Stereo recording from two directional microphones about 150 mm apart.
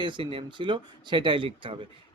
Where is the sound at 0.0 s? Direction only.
35° right (ahead or behind).